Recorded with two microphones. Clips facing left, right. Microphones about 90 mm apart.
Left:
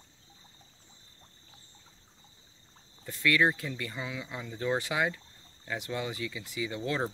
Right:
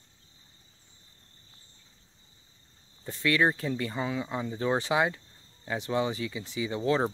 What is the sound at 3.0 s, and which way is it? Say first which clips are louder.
Speech: right 1 dB; 25° right (ahead or behind).